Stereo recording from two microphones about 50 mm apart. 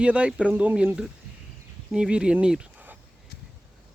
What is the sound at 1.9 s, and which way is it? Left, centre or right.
Speech, centre.